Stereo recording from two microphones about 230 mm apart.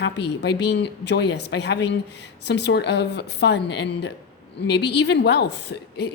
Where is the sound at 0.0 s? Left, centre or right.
Left.